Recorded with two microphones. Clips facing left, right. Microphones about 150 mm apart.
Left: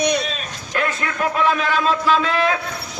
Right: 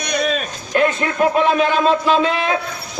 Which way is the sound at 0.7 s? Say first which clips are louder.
Right 6 dB; 30° right (ahead or behind).